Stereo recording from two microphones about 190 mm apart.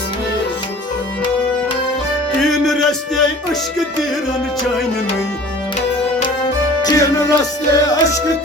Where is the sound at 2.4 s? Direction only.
Centre (ahead or behind).